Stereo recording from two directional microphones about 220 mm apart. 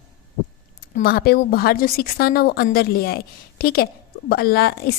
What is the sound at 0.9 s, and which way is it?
A woman's voice, 45° left (ahead or behind).